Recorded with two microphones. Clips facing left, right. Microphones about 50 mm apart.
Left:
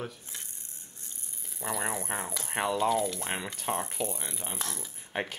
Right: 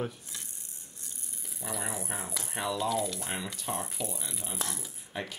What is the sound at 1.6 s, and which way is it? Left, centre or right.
Speech, centre.